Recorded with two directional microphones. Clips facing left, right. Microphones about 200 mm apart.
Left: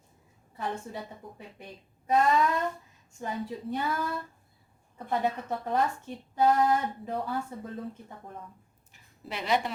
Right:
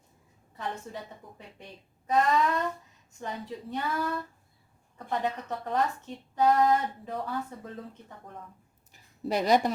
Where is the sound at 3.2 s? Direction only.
10° left (ahead or behind).